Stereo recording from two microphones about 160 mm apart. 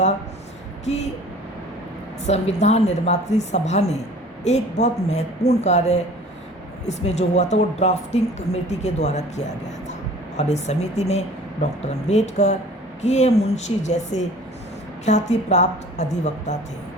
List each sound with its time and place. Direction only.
0.9 s speech: 45° left (ahead or behind)
2.2 s speech: 45° left (ahead or behind)